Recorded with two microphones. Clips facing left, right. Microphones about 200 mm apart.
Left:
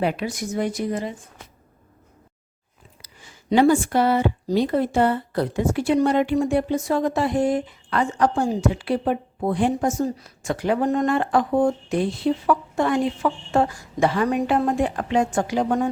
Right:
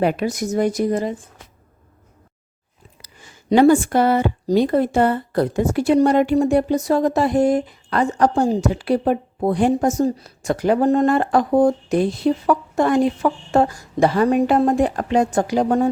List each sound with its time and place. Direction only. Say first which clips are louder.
0.0 s a woman's voice: right 5 dB; 45° right (ahead or behind)
3.5 s a woman's voice: right 4 dB; 50° right (ahead or behind)